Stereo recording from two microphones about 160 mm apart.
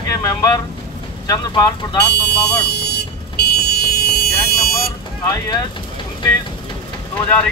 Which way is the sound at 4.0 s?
70° left (ahead or behind).